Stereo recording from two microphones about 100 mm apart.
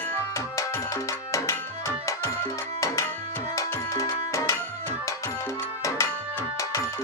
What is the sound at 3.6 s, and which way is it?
Music, 35° left (ahead or behind).